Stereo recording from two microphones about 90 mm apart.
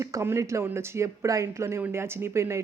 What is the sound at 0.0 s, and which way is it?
Speech, 35° right (ahead or behind).